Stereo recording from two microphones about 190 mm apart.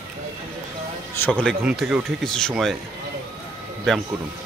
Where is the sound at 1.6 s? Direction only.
5° right (ahead or behind).